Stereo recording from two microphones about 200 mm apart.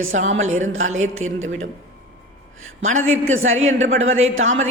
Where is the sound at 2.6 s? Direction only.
90° right.